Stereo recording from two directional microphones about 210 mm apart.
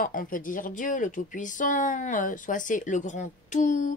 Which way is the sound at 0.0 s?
40° left (ahead or behind).